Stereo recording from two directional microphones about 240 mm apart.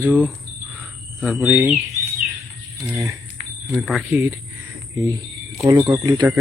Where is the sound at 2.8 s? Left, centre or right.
Centre.